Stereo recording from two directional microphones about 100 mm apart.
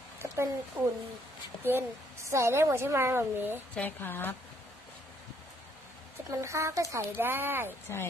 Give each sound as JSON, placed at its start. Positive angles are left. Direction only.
{"t": 0.2, "sound": "a woman's voice", "side_deg": -25}
{"t": 3.7, "sound": "a woman's voice", "side_deg": 20}
{"t": 6.4, "sound": "a woman's voice", "side_deg": -25}